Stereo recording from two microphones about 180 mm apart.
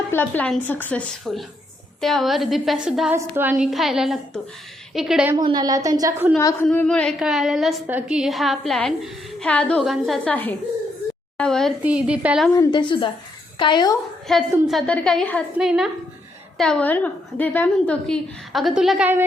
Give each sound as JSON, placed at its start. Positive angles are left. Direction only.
{"t": 0.1, "sound": "a woman's voice", "side_deg": 10}
{"t": 5.4, "sound": "a woman's voice", "side_deg": -25}
{"t": 6.3, "sound": "a woman's voice", "side_deg": 10}
{"t": 12.5, "sound": "a woman's voice", "side_deg": 25}
{"t": 14.3, "sound": "a woman's voice", "side_deg": 0}